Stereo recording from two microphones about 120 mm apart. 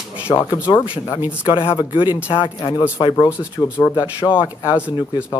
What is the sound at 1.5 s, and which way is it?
Speech, 50° left (ahead or behind).